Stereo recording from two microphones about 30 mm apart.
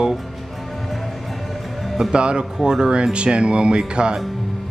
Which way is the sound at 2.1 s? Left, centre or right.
Right.